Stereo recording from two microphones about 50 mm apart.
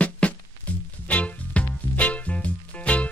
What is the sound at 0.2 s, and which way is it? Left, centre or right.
Music, left.